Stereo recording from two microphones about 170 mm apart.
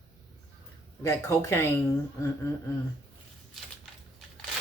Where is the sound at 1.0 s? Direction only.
15° left (ahead or behind).